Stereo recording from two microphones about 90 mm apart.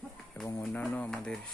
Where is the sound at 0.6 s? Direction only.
15° left (ahead or behind).